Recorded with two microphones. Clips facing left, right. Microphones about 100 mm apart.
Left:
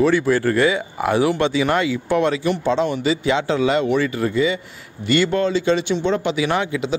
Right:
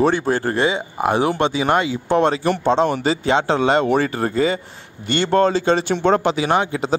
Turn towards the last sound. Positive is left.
turn(degrees=-35)  # may be behind; listen again after turning